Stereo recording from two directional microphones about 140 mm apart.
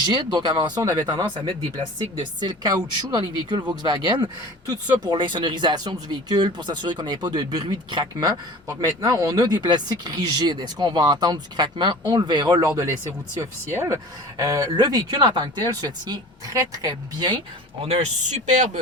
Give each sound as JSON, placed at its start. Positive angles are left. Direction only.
{"t": 0.0, "sound": "speech", "side_deg": -30}
{"t": 17.8, "sound": "speech", "side_deg": -50}